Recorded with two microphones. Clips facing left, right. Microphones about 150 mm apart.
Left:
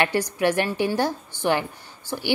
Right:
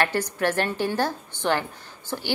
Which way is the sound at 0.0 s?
15° left (ahead or behind).